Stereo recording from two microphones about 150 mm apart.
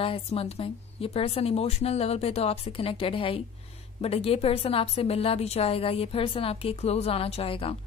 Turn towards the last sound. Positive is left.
turn(degrees=40)  # may be behind; listen again after turning